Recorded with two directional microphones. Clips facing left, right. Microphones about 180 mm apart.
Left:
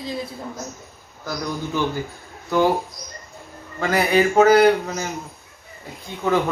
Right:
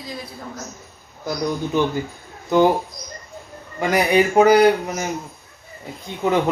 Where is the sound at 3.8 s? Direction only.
15° right (ahead or behind).